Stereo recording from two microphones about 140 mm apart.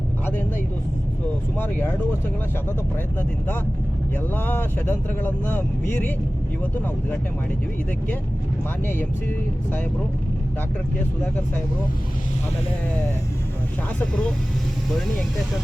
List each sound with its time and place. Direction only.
1.5 s speech: 15° left (ahead or behind)
3.2 s speech: 15° left (ahead or behind)
8.9 s speech: 15° left (ahead or behind)
14.0 s speech: 5° left (ahead or behind)